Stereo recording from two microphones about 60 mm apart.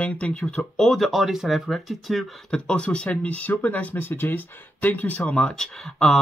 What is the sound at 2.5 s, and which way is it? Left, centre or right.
Speech, centre.